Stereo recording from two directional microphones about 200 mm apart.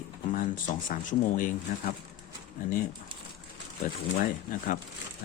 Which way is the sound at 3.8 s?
45° left (ahead or behind).